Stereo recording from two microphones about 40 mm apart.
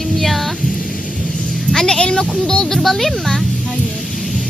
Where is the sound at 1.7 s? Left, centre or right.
Centre.